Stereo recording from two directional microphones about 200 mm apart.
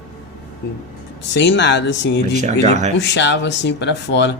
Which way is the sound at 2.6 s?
35° right (ahead or behind).